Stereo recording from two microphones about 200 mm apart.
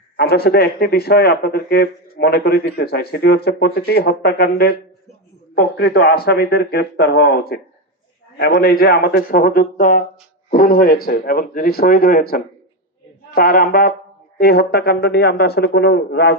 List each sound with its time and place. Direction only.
0.2 s speech: 55° left (ahead or behind)